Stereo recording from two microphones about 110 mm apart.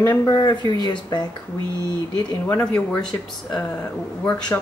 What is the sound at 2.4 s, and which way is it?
Speech, 15° left (ahead or behind).